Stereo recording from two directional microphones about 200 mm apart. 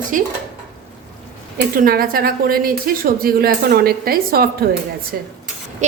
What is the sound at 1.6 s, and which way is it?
A woman's voice, 45° right (ahead or behind).